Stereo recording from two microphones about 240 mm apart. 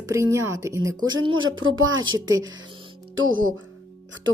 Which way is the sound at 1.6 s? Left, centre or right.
Right.